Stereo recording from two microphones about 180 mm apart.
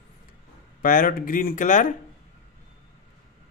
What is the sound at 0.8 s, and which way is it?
Speech, 50° left (ahead or behind).